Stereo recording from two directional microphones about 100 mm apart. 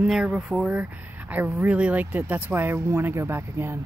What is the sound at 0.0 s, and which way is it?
Speech, 10° right (ahead or behind).